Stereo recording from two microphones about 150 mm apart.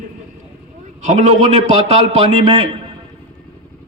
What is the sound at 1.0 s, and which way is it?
A man's voice, 50° right (ahead or behind).